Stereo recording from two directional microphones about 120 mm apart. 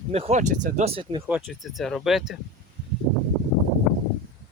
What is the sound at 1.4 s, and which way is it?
Speech, centre (ahead or behind).